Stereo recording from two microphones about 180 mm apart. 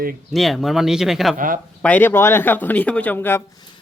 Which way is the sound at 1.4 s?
50° right (ahead or behind).